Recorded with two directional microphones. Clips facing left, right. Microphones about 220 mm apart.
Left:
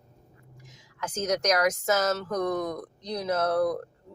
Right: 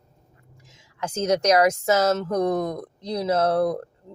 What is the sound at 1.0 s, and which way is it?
Speech, 30° right (ahead or behind).